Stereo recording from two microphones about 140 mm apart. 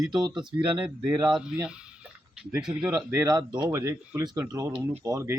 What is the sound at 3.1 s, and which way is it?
Speech, 20° right (ahead or behind).